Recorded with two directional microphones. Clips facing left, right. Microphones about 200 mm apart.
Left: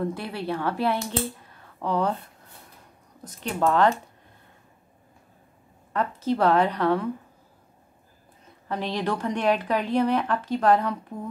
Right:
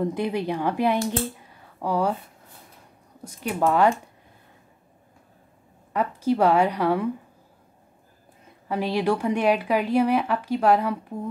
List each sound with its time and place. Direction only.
0.0 s speech: 15° right (ahead or behind)
1.5 s a sound: 10° right (ahead or behind)
3.3 s speech: 10° right (ahead or behind)
5.9 s speech: 10° right (ahead or behind)
8.6 s speech: 10° right (ahead or behind)